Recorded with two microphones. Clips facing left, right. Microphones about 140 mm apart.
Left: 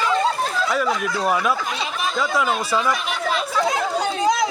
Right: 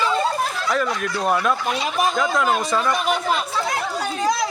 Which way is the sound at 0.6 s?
5° left (ahead or behind).